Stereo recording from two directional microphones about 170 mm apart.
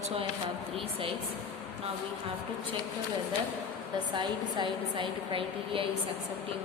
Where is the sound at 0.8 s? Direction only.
30° right (ahead or behind).